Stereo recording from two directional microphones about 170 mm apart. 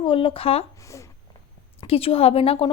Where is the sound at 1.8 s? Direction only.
35° left (ahead or behind).